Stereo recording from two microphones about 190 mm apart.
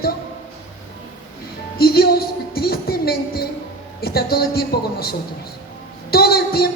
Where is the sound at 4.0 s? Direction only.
55° left (ahead or behind).